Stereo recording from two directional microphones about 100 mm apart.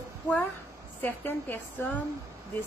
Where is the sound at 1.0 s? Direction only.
20° left (ahead or behind).